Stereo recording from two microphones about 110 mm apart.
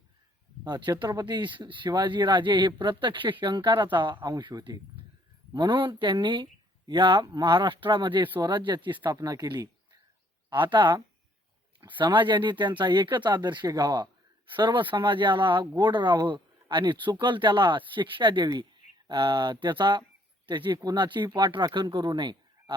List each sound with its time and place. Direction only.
0.6 s speech: 40° right (ahead or behind)
9.1 s speech: 35° right (ahead or behind)
10.5 s speech: 45° right (ahead or behind)